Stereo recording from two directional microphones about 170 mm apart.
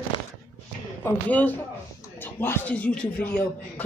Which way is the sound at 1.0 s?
10° left (ahead or behind).